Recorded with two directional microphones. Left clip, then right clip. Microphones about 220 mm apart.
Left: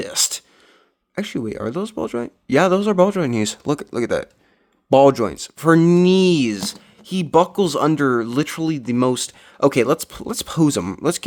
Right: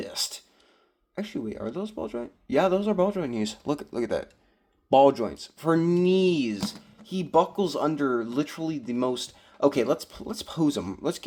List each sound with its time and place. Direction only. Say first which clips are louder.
0.0 s speech: left 10 dB; 40° left (ahead or behind)